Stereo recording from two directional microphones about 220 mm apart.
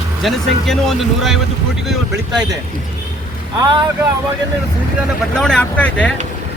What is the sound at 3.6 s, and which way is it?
Speech, 20° right (ahead or behind).